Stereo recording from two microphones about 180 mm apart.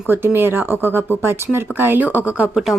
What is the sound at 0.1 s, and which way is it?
Speech, 10° right (ahead or behind).